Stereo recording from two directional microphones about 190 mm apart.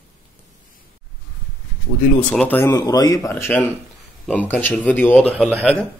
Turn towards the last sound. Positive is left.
turn(degrees=0)  # may be behind; listen again after turning